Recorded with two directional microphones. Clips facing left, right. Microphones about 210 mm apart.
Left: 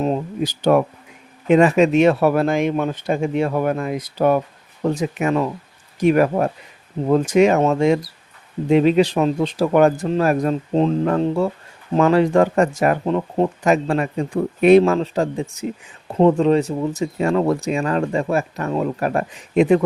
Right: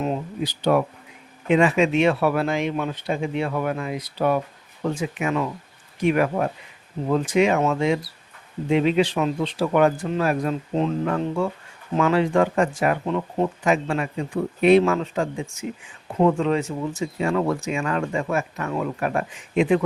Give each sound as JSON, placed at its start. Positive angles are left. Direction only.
{"t": 0.0, "sound": "speech", "side_deg": 40}